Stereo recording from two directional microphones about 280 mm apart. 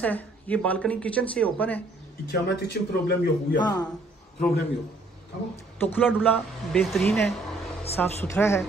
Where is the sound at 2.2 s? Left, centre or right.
Left.